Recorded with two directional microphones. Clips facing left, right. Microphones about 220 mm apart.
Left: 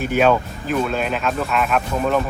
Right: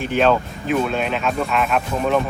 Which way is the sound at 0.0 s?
5° left (ahead or behind).